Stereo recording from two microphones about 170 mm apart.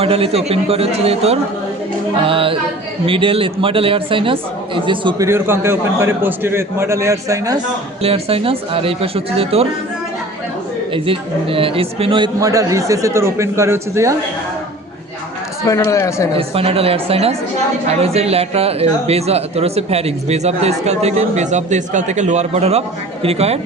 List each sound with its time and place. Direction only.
0.0 s speech: 35° right (ahead or behind)
8.0 s speech: 35° right (ahead or behind)
10.9 s speech: 30° right (ahead or behind); by 14.2 s 15° right (ahead or behind)
15.6 s speech: 20° left (ahead or behind)
16.3 s speech: 35° right (ahead or behind)